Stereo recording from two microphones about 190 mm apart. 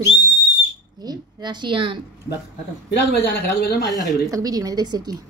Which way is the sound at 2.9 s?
55° left (ahead or behind).